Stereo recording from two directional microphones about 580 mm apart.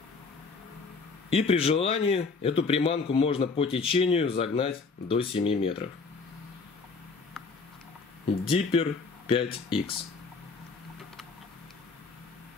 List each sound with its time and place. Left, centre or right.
1.3 s a man's voice: centre
8.5 s a man's voice: centre